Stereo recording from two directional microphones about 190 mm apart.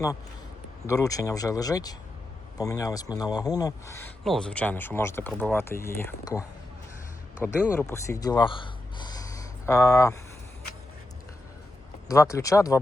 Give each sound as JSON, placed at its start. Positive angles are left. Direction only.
{"t": 0.9, "sound": "speech", "side_deg": 15}
{"t": 4.2, "sound": "speech", "side_deg": 5}
{"t": 7.4, "sound": "speech", "side_deg": 15}
{"t": 12.0, "sound": "speech", "side_deg": 15}